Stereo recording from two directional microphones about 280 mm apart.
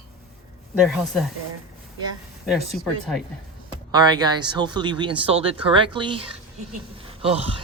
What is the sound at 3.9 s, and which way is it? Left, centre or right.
Speech, centre.